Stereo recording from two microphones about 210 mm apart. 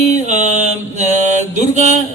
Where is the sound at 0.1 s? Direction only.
35° right (ahead or behind).